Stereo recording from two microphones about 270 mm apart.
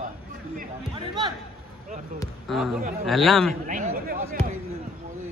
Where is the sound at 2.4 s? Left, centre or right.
Centre.